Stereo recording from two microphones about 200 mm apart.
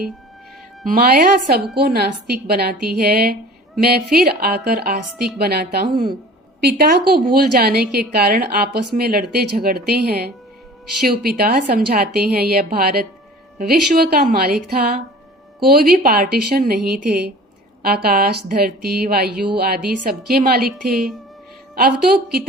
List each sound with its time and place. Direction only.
0.9 s a woman's voice: 45° right (ahead or behind)